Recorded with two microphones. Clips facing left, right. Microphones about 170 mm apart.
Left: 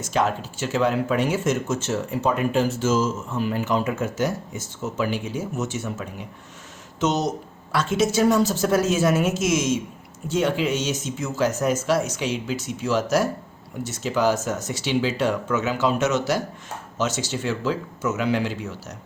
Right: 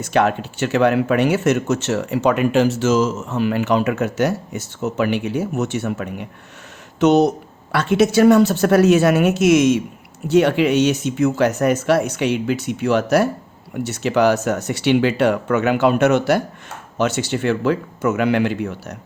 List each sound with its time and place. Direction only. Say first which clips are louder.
0.0 s speech: right 5 dB; 65° right (ahead or behind)